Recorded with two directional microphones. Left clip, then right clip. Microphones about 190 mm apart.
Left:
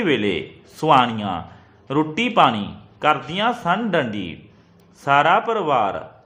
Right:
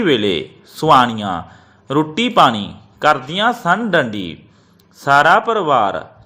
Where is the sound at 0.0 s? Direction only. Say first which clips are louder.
Right 5 dB; 20° right (ahead or behind).